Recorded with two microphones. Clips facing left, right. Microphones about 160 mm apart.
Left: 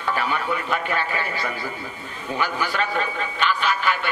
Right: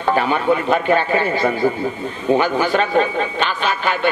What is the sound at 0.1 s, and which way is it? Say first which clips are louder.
A man's voice: right 8 dB; 25° right (ahead or behind).